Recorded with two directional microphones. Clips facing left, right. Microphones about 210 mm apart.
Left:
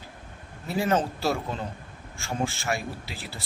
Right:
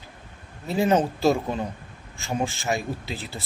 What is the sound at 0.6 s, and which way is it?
A man's voice, 20° right (ahead or behind).